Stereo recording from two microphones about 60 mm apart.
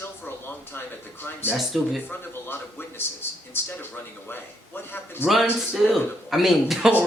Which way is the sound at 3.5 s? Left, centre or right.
Left.